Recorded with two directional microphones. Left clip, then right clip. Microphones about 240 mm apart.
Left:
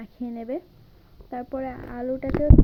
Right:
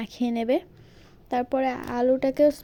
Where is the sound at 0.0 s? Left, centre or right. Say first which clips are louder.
Right 7 dB; right.